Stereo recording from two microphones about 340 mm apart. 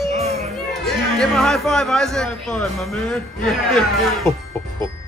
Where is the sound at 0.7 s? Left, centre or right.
Centre.